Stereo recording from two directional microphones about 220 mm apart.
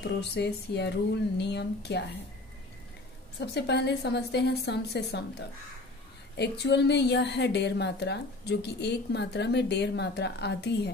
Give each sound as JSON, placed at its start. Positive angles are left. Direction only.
{"t": 0.0, "sound": "a woman's voice", "side_deg": 50}
{"t": 3.3, "sound": "a woman's voice", "side_deg": 50}